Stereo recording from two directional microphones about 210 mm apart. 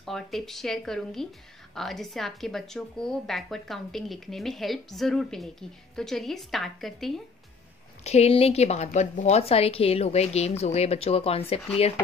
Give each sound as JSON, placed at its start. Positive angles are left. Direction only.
{"t": 0.0, "sound": "a woman's voice", "side_deg": 0}
{"t": 8.0, "sound": "a woman's voice", "side_deg": 30}